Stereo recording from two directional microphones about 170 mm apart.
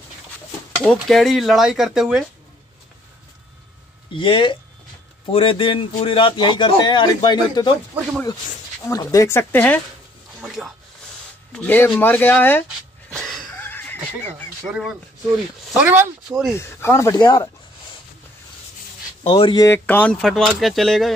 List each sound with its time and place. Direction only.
0.8 s speech: centre (ahead or behind)
4.1 s a man's voice: 30° left (ahead or behind)
8.8 s speech: 20° left (ahead or behind)
10.4 s speech: centre (ahead or behind)
11.5 s speech: 10° left (ahead or behind)
13.1 s wheeze: centre (ahead or behind)
13.6 s a sound: 10° left (ahead or behind)
14.7 s speech: centre (ahead or behind)
16.5 s speech: 15° left (ahead or behind)
19.2 s a man's voice: 30° left (ahead or behind)
19.6 s speech: 15° left (ahead or behind)